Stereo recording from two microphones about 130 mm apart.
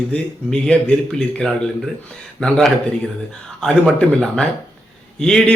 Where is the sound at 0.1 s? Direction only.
10° left (ahead or behind).